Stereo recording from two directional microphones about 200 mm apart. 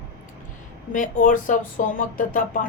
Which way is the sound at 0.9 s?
40° left (ahead or behind).